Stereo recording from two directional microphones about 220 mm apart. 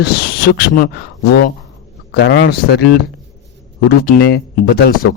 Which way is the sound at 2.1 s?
55° left (ahead or behind).